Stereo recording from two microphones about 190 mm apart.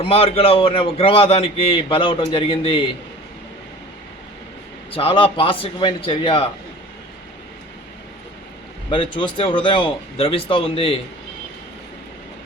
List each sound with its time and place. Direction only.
0.0 s a man's voice: 30° left (ahead or behind)
4.9 s a man's voice: 25° left (ahead or behind)
8.9 s a man's voice: 25° left (ahead or behind)